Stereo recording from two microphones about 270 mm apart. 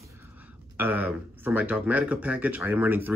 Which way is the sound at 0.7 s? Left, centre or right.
Centre.